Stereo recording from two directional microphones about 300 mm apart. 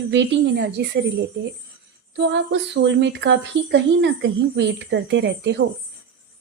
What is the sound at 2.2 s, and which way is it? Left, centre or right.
Speech, right.